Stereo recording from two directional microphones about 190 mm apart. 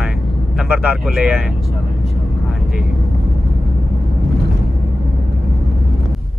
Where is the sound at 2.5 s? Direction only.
5° right (ahead or behind).